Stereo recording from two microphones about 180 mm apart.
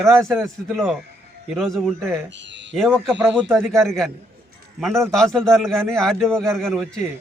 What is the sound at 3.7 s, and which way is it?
Speech, 15° right (ahead or behind).